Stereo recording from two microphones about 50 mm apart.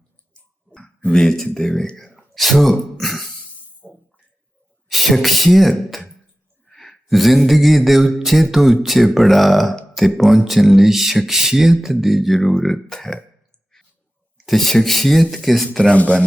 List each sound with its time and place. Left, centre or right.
1.1 s speech: centre
2.1 s throat clearing: centre
3.8 s water: left
4.9 s speech: centre
14.3 s speech: centre
15.8 s speech: left